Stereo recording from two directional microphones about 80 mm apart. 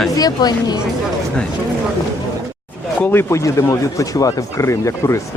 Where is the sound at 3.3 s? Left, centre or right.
Left.